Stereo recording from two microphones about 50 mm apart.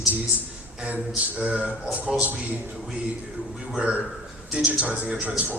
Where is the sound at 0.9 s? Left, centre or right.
Right.